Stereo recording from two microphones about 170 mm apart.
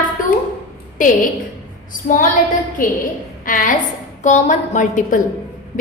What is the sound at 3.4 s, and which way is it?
A woman's voice, 50° left (ahead or behind).